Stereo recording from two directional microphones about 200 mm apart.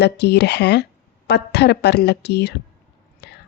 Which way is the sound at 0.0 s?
55° left (ahead or behind).